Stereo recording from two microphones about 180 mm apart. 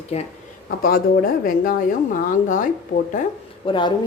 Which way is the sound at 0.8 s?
55° left (ahead or behind).